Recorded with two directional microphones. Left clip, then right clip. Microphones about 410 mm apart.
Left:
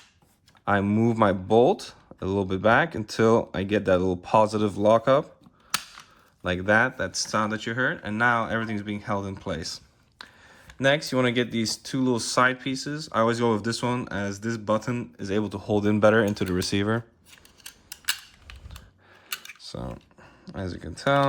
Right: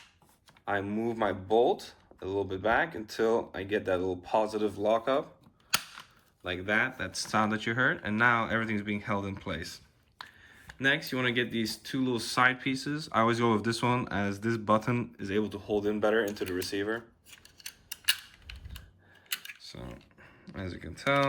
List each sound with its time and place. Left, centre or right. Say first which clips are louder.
0.6 s speech: left 8 dB; centre
6.4 s speech: left 7 dB; centre
19.5 s a sound: left 8 dB; centre